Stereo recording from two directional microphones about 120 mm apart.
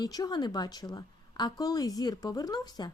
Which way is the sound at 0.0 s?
35° left (ahead or behind).